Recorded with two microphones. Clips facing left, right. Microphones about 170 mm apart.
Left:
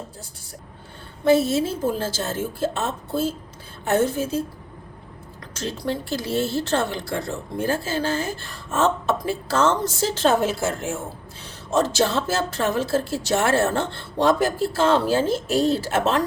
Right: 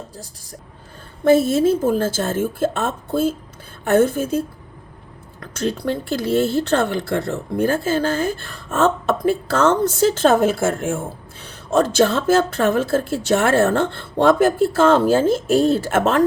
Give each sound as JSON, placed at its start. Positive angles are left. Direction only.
{"t": 1.2, "sound": "speech", "side_deg": -50}